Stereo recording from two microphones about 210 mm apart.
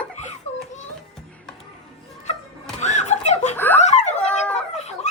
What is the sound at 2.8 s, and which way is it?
Snicker, 35° left (ahead or behind).